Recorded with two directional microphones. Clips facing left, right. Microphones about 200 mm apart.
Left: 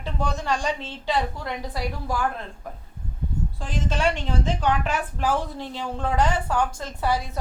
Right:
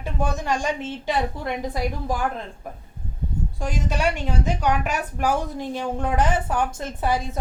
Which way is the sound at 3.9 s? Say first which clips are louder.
Left 1 dB; 10° right (ahead or behind).